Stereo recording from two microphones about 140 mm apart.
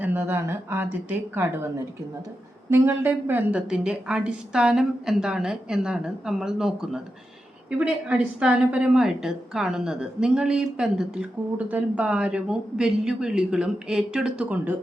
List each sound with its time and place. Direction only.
0.0 s a woman's voice: 15° right (ahead or behind)